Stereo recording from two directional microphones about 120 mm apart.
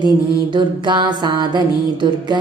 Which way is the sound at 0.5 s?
40° right (ahead or behind).